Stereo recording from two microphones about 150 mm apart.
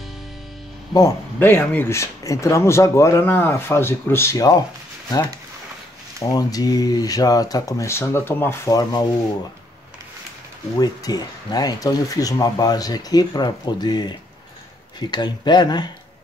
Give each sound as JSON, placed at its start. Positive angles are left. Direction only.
{"t": 0.9, "sound": "speech", "side_deg": 20}
{"t": 6.2, "sound": "speech", "side_deg": 25}
{"t": 10.8, "sound": "speech", "side_deg": 25}